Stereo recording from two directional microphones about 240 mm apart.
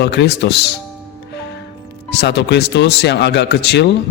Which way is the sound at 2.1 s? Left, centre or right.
Left.